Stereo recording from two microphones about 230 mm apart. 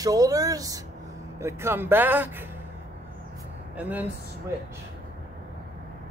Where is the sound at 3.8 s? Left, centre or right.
Centre.